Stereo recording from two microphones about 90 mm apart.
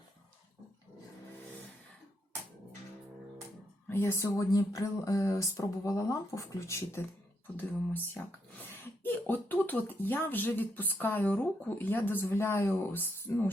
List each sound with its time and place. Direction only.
3.8 s speech: 25° left (ahead or behind)
4.5 s speech: 40° left (ahead or behind)
7.5 s speech: 20° left (ahead or behind)